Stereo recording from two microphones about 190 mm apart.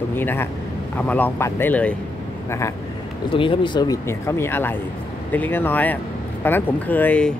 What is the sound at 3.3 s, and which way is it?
Speech, 25° left (ahead or behind).